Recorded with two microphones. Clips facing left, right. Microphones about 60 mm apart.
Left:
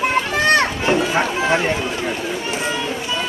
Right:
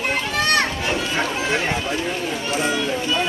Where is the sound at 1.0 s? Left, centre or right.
Left.